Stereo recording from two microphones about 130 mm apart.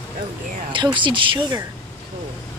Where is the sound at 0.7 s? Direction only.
40° right (ahead or behind).